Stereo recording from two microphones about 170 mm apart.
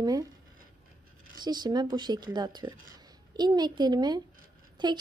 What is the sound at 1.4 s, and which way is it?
Speech, 25° right (ahead or behind).